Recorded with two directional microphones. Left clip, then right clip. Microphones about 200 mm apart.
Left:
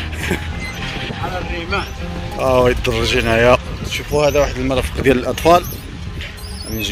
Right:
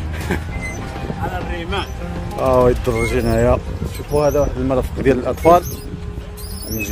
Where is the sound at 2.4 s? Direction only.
5° left (ahead or behind).